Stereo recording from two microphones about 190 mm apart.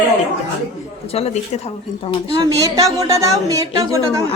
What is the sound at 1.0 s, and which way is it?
Speech, 35° left (ahead or behind).